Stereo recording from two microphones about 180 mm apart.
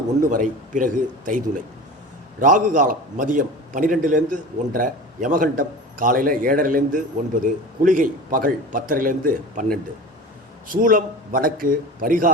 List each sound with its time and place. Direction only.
0.2 s a man's voice: 50° right (ahead or behind)
10.7 s a man's voice: 50° right (ahead or behind)